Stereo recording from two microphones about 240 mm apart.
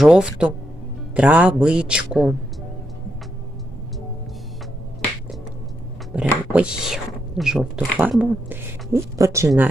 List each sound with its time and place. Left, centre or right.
0.0 s speech: centre
6.1 s speech: centre